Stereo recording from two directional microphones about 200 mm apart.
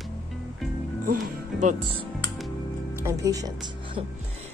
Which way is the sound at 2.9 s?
15° right (ahead or behind).